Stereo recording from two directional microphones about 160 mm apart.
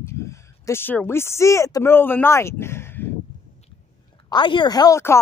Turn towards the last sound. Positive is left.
turn(degrees=20)  # may be behind; listen again after turning